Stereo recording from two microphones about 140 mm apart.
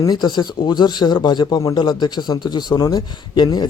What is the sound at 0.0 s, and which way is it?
A man's voice, 30° left (ahead or behind).